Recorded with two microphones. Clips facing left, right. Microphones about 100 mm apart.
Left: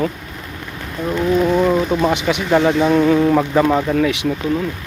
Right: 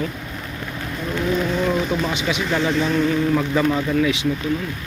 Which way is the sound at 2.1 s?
55° left (ahead or behind).